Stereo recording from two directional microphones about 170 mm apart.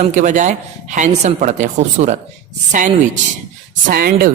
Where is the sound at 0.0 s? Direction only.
45° right (ahead or behind).